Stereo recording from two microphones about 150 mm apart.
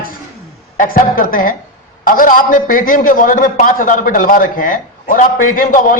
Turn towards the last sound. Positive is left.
turn(degrees=65)  # may be behind; listen again after turning